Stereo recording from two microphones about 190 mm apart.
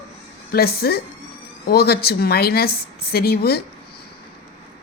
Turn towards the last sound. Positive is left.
turn(degrees=55)  # may be behind; listen again after turning